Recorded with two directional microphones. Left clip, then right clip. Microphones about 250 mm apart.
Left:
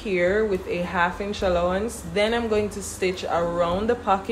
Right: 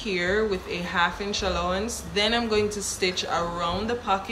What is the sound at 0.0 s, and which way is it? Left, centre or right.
A woman's voice, centre.